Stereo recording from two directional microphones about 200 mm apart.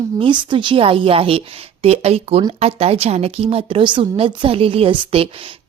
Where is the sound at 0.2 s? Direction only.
25° right (ahead or behind).